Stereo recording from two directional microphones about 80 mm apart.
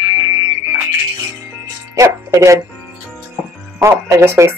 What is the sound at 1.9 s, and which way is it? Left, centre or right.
Speech, right.